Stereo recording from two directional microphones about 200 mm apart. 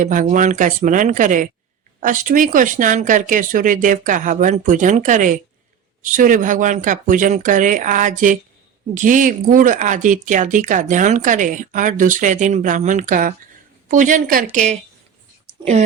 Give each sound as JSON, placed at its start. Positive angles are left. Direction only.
{"t": 0.0, "sound": "speech", "side_deg": -40}